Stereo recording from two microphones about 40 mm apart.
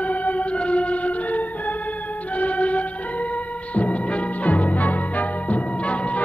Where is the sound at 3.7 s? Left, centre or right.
Left.